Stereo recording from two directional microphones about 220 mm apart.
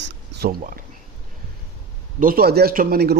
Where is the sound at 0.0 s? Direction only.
40° right (ahead or behind).